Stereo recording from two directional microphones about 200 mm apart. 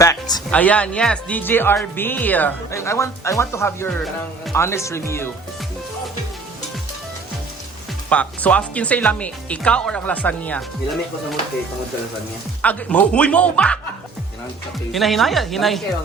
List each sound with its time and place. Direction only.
0.0 s music: 20° left (ahead or behind)
0.5 s speech: 5° left (ahead or behind)
8.1 s speech: 5° left (ahead or behind)
12.6 s speech: 5° left (ahead or behind)
14.9 s speech: centre (ahead or behind)